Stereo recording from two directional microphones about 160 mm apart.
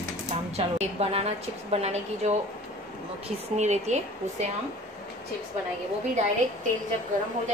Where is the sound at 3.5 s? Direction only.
45° right (ahead or behind).